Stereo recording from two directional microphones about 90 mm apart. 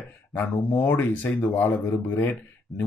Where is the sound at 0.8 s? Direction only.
15° left (ahead or behind).